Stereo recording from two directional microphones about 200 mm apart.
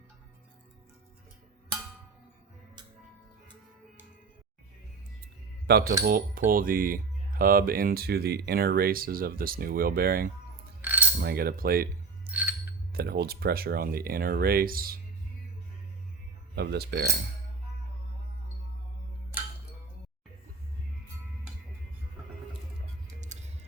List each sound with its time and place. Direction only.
6.0 s a sound: 45° right (ahead or behind)
6.5 s speech: 45° right (ahead or behind)
10.8 s cutlery: 10° right (ahead or behind)
11.2 s speech: 50° right (ahead or behind)
12.3 s bicycle bell: 10° right (ahead or behind)
12.9 s speech: 50° right (ahead or behind)
16.6 s speech: 55° right (ahead or behind)
23.3 s music: 35° right (ahead or behind)